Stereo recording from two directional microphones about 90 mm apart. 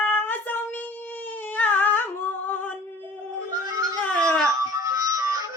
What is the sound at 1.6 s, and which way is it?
Humming, 20° left (ahead or behind).